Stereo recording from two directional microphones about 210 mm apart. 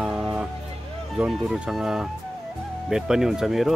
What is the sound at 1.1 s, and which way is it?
Speech, centre (ahead or behind).